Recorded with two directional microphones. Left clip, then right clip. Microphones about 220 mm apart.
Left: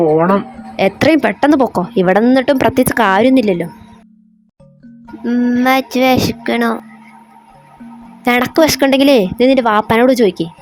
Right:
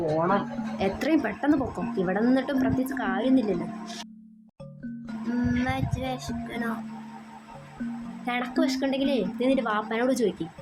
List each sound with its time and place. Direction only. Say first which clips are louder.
0.8 s speech: left 14 dB; 40° left (ahead or behind)
5.3 s speech: left 16 dB; 35° left (ahead or behind)
8.2 s speech: left 16 dB; 45° left (ahead or behind)